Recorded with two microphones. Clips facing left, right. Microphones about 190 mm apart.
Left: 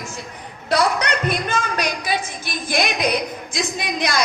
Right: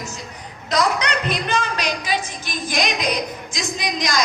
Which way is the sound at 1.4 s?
55° left (ahead or behind).